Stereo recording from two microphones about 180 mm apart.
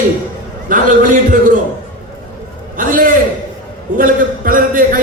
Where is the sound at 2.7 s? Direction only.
50° right (ahead or behind).